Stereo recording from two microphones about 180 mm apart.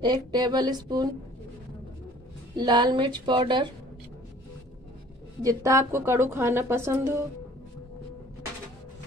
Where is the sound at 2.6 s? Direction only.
25° right (ahead or behind).